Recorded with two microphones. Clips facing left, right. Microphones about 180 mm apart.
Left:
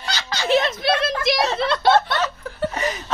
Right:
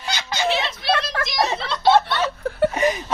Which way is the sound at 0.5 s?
45° left (ahead or behind).